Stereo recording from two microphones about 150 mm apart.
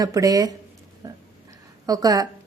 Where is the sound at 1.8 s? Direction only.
25° right (ahead or behind).